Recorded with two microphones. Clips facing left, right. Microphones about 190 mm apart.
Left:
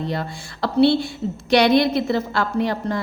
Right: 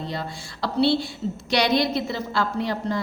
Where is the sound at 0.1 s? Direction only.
55° left (ahead or behind).